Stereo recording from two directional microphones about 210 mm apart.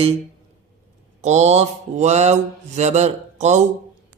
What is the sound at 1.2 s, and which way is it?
Speech, 35° right (ahead or behind).